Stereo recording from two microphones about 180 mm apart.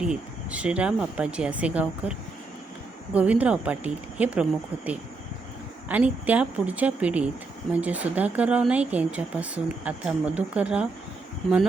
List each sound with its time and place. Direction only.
0.0 s speech: 5° right (ahead or behind)
5.9 s speech: 10° right (ahead or behind)